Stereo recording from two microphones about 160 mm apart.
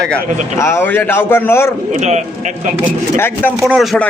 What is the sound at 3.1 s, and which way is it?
Speech, 15° left (ahead or behind).